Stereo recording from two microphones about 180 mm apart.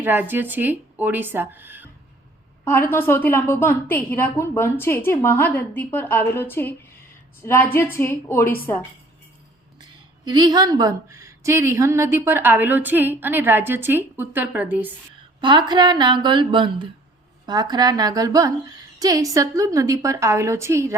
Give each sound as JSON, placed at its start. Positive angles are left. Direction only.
{"t": 0.0, "sound": "speech", "side_deg": -10}
{"t": 2.6, "sound": "a woman's voice", "side_deg": 10}
{"t": 10.2, "sound": "a woman's voice", "side_deg": -20}
{"t": 15.4, "sound": "a woman's voice", "side_deg": -25}